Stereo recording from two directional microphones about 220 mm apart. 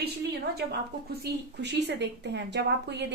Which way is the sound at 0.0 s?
45° right (ahead or behind).